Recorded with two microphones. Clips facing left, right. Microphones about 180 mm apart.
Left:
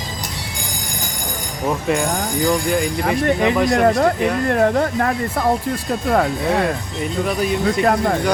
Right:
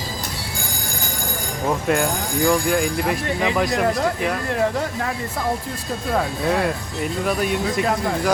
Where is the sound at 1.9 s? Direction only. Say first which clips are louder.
Even; centre (ahead or behind).